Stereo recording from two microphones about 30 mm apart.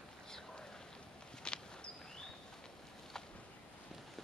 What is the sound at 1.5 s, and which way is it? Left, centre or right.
Walk, left.